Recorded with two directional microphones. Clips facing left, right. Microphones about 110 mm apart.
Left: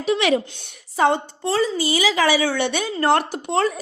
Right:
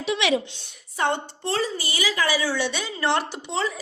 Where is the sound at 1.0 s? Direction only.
90° left; by 2.9 s 60° left (ahead or behind).